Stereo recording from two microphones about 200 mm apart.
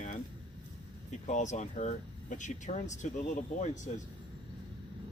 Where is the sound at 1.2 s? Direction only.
35° left (ahead or behind).